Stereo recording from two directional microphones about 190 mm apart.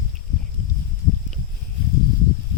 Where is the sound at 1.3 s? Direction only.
Centre (ahead or behind).